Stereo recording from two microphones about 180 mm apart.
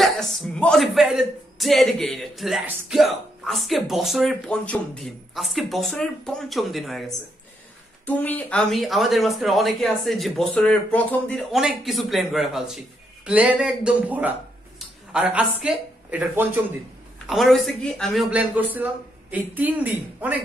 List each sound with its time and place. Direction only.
0.0 s a man's voice: centre (ahead or behind)